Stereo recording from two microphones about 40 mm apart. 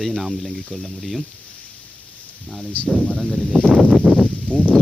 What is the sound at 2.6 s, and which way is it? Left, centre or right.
Speech, left.